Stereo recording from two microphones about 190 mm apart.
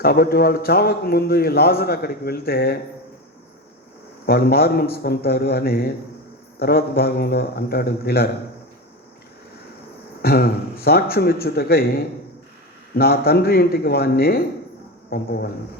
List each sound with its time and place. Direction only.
0.0 s a man's voice: 55° left (ahead or behind)
4.3 s a man's voice: 55° left (ahead or behind)
10.2 s a man's voice: 55° left (ahead or behind)